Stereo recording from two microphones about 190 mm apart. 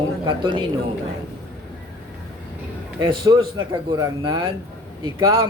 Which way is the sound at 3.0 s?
20° right (ahead or behind).